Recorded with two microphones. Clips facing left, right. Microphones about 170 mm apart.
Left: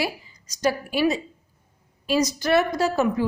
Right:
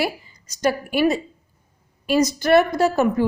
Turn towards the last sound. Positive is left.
turn(degrees=-55)  # may be behind; listen again after turning